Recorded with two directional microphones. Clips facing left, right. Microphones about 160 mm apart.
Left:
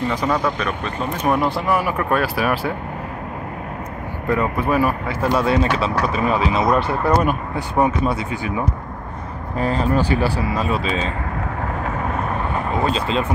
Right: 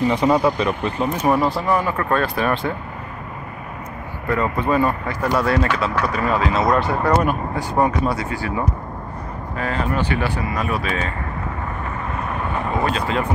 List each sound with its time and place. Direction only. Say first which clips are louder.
0.1 s speech: right 4 dB; 25° right (ahead or behind)
1.2 s speech: even; centre (ahead or behind)
4.3 s speech: even; 10° left (ahead or behind)
5.2 s speech: left 1 dB; 25° left (ahead or behind)
9.6 s speech: left 4 dB; 35° left (ahead or behind)
12.9 s speech: left 1 dB; 25° left (ahead or behind)